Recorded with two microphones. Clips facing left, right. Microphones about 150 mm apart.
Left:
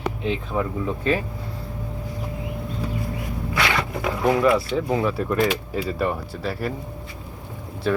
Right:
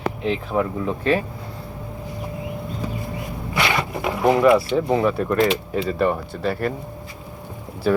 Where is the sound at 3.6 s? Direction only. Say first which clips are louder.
Right 2 dB; 15° right (ahead or behind).